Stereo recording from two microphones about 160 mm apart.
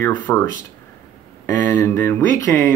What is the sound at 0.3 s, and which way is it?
Speech, 10° left (ahead or behind).